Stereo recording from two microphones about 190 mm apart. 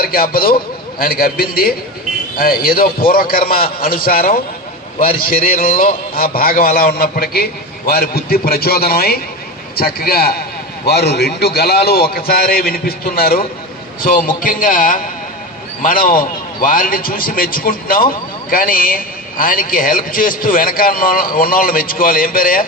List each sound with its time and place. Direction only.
0.0 s a man's voice: 50° left (ahead or behind)